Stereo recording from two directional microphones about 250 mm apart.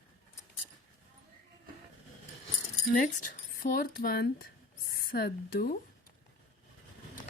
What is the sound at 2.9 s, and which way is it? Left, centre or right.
Speech, left.